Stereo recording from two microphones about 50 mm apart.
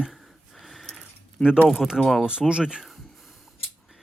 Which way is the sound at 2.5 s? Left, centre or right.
Centre.